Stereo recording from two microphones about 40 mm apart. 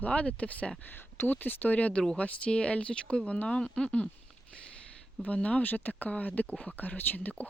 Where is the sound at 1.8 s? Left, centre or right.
Left.